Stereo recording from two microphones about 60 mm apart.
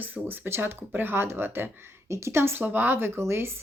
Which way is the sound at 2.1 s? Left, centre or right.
Right.